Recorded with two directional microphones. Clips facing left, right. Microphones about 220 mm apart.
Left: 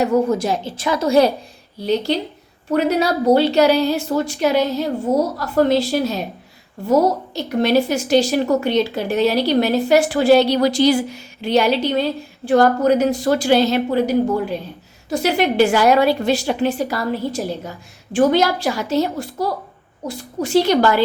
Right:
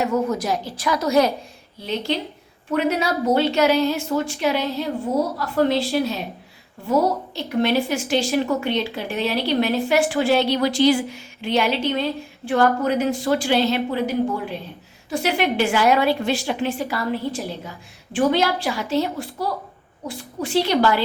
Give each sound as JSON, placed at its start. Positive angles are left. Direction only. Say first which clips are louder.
{"t": 0.0, "sound": "a woman's voice", "louder": "left 5 dB", "side_deg": 30}